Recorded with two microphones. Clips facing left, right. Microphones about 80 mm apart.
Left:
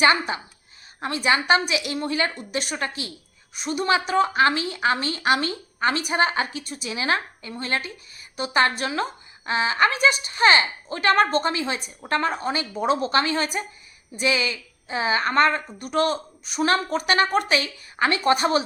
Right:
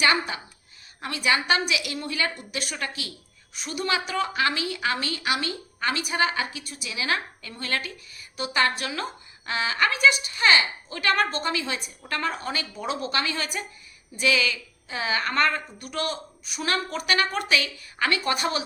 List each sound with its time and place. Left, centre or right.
0.0 s a woman's voice: left